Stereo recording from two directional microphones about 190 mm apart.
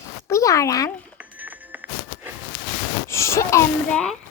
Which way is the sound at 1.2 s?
10° right (ahead or behind).